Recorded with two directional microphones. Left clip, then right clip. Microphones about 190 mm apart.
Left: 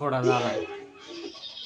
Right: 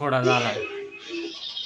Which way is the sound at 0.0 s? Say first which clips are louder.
Right 3 dB; 5° right (ahead or behind).